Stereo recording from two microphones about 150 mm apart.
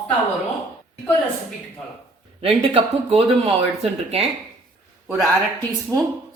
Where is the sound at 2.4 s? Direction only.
40° right (ahead or behind).